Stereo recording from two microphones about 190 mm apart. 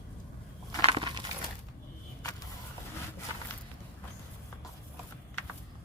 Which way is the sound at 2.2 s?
20° left (ahead or behind).